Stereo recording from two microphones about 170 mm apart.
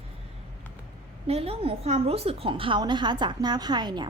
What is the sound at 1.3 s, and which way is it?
A woman's voice, 35° right (ahead or behind).